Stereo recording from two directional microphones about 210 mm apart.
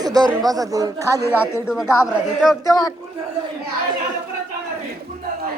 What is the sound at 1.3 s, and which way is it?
Speech, 10° left (ahead or behind).